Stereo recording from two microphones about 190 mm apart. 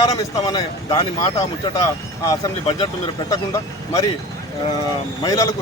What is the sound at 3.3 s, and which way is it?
Speech, 15° left (ahead or behind).